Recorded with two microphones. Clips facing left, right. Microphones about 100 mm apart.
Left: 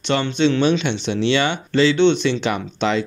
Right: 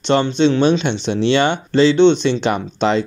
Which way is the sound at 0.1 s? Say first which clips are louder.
Right 4 dB; 30° right (ahead or behind).